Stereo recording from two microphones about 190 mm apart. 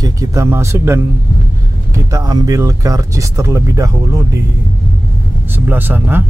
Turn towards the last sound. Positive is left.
turn(degrees=-10)  # may be behind; listen again after turning